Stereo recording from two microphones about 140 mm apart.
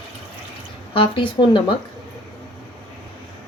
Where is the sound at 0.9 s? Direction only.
40° left (ahead or behind).